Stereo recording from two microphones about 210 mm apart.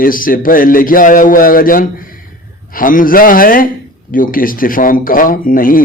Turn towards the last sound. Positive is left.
turn(degrees=40)  # may be behind; listen again after turning